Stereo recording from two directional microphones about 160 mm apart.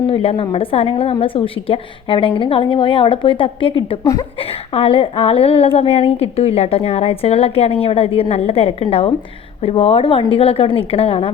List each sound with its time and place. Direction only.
0.1 s a woman's voice: 35° left (ahead or behind)
4.7 s a woman's voice: 35° left (ahead or behind)